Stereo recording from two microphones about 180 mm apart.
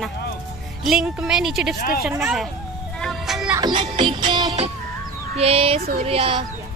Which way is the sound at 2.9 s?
Centre (ahead or behind).